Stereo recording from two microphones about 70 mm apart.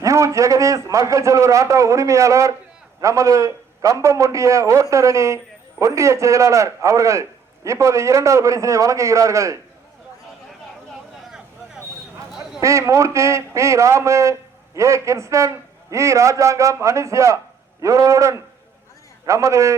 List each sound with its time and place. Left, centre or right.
0.0 s a man's voice: right
12.3 s a sound: centre
12.5 s a man's voice: right